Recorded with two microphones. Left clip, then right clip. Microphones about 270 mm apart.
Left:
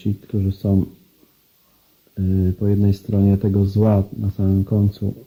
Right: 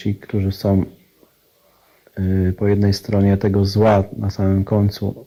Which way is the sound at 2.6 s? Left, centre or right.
Right.